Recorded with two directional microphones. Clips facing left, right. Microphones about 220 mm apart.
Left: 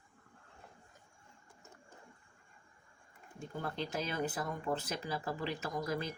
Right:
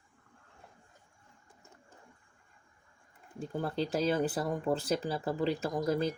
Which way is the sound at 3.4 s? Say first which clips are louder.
Right 6 dB; 35° right (ahead or behind).